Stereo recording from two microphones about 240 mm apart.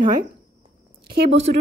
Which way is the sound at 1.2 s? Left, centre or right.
Right.